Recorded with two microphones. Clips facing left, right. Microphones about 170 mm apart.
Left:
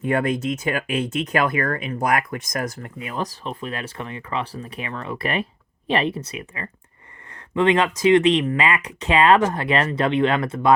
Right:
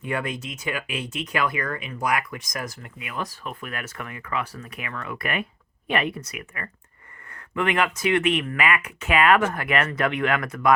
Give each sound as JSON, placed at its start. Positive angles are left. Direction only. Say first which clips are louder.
{"t": 0.0, "sound": "speech", "louder": "left 8 dB", "side_deg": 50}
{"t": 3.0, "sound": "speech", "louder": "left 4 dB", "side_deg": 35}